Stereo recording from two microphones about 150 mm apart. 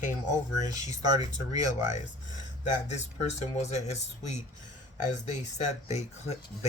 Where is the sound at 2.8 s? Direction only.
50° left (ahead or behind).